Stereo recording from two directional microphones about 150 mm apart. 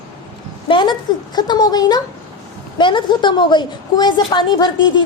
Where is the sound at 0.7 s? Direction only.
30° left (ahead or behind).